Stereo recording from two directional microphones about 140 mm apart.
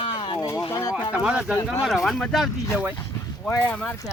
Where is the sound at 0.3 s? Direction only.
25° left (ahead or behind).